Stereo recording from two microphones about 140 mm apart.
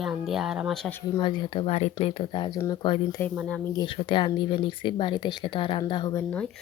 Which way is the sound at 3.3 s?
5° left (ahead or behind).